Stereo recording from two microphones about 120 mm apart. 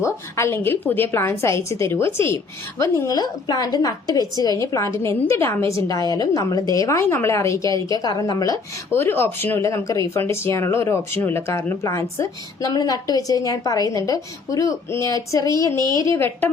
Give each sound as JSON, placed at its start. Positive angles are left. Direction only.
{"t": 0.0, "sound": "speech", "side_deg": 20}
{"t": 3.2, "sound": "a woman's voice", "side_deg": 35}
{"t": 8.9, "sound": "speech", "side_deg": 20}